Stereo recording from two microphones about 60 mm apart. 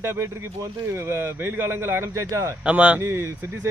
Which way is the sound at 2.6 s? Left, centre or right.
Right.